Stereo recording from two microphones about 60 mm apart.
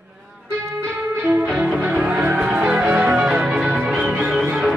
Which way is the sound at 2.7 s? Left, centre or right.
Centre.